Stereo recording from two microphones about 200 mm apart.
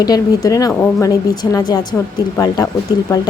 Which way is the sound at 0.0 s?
20° left (ahead or behind).